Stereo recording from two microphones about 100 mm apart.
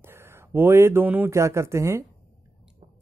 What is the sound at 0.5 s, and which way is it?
Speech, 25° right (ahead or behind).